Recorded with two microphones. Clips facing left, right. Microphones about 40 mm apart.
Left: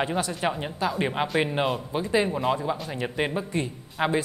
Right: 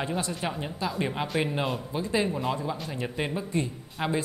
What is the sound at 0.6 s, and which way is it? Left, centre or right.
Speech, left.